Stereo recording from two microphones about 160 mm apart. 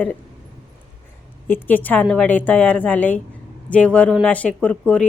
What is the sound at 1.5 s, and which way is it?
Speech, 10° left (ahead or behind).